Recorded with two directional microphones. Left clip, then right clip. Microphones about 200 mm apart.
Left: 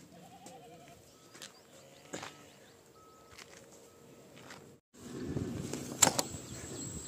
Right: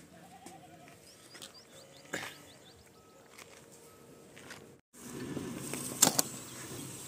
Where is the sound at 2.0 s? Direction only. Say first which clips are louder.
Right 4 dB; centre (ahead or behind).